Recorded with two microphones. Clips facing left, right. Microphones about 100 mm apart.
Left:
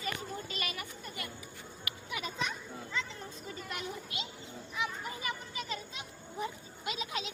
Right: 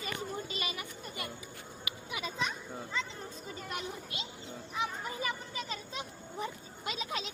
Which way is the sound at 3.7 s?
30° right (ahead or behind).